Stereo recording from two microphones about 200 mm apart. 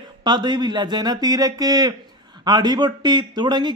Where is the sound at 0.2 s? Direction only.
20° right (ahead or behind).